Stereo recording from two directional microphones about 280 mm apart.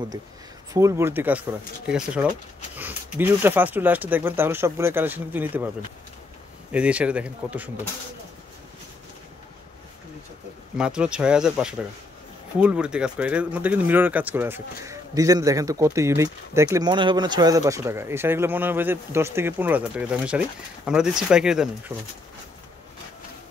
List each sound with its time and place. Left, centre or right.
0.7 s speech: centre
6.7 s speech: centre
10.8 s speech: centre